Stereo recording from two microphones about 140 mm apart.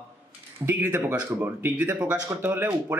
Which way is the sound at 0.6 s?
10° right (ahead or behind).